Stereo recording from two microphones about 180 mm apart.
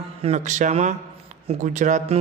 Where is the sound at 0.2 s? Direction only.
40° right (ahead or behind).